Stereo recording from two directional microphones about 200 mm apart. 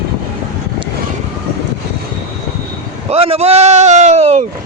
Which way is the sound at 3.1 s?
30° right (ahead or behind).